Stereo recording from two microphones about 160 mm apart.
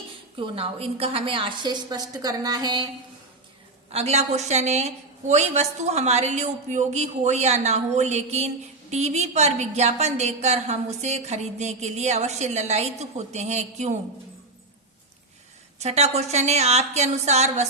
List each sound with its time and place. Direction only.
0.3 s a woman's voice: 35° right (ahead or behind)
3.9 s a woman's voice: 40° right (ahead or behind)
15.8 s a woman's voice: 45° right (ahead or behind)